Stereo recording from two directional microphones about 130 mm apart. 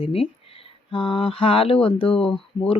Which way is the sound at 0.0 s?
45° left (ahead or behind).